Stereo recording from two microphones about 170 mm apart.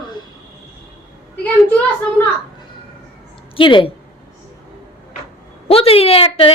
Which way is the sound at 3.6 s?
30° left (ahead or behind).